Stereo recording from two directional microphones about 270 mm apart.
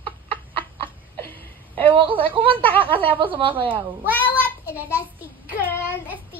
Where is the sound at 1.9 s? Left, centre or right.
Centre.